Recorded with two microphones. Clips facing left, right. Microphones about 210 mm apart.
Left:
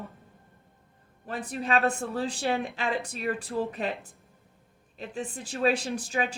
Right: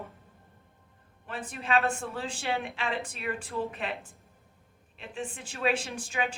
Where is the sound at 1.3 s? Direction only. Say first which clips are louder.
Left 2 dB; 40° left (ahead or behind).